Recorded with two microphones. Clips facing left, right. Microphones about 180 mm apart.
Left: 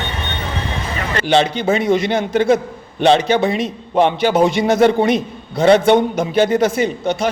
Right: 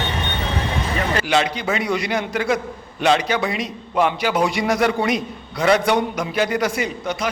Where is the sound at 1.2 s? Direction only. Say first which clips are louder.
Left 10 dB; 30° left (ahead or behind).